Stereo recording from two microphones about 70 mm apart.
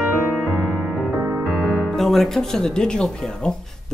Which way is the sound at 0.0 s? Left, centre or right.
Centre.